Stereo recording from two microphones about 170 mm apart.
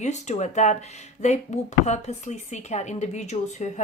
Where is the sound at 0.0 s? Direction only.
45° left (ahead or behind).